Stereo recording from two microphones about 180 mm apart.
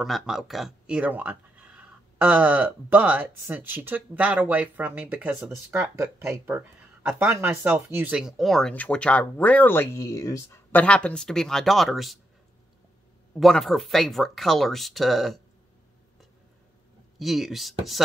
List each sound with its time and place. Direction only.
0.0 s speech: centre (ahead or behind)
13.3 s speech: centre (ahead or behind)
17.2 s speech: centre (ahead or behind)